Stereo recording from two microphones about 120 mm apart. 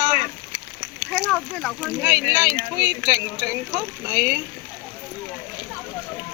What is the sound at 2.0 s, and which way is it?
Speech, 30° right (ahead or behind).